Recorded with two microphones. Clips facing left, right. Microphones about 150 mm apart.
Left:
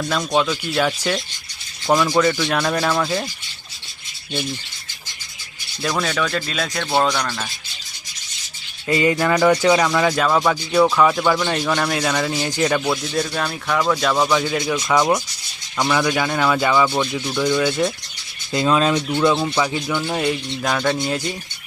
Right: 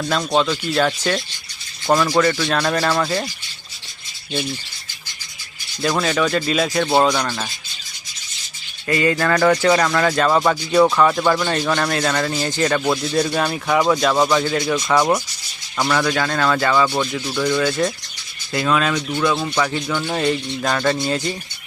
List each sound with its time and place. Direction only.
0.0 s speech: centre (ahead or behind)
5.8 s speech: 5° right (ahead or behind)
8.9 s speech: 20° left (ahead or behind)
9.1 s speech: 10° left (ahead or behind)
12.8 s speech: 10° right (ahead or behind); by 16.8 s 10° left (ahead or behind)
16.8 s speech: centre (ahead or behind)
18.5 s speech: 25° left (ahead or behind)
19.4 s speech: 10° left (ahead or behind)